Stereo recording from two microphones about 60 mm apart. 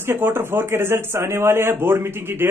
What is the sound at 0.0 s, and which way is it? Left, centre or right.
Speech, right.